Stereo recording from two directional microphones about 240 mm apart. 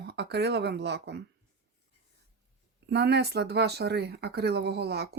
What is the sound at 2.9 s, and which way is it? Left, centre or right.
Speech, right.